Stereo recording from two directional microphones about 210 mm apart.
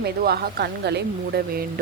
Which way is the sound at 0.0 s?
50° right (ahead or behind).